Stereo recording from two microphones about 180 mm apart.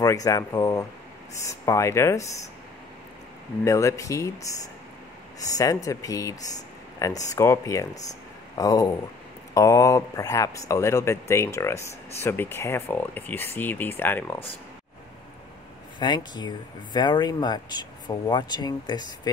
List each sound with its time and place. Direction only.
0.0 s speech: 20° left (ahead or behind)
3.6 s speech: 15° left (ahead or behind)
5.6 s speech: 20° left (ahead or behind)
16.0 s speech: 25° left (ahead or behind)